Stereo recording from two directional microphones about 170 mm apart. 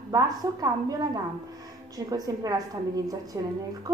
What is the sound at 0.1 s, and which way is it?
A woman's voice, 20° right (ahead or behind).